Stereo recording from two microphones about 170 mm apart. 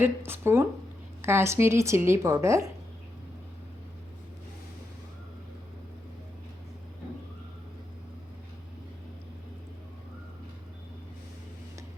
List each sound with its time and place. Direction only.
0.0 s speech: 15° right (ahead or behind)